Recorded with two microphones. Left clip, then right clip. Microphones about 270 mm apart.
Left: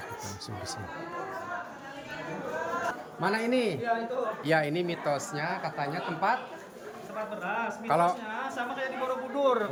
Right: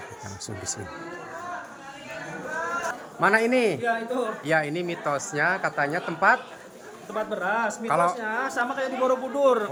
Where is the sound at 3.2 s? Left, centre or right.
Centre.